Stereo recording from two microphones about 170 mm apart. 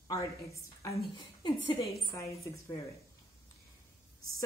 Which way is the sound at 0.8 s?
20° left (ahead or behind).